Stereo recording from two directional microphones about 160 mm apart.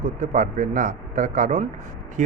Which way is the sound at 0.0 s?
50° right (ahead or behind).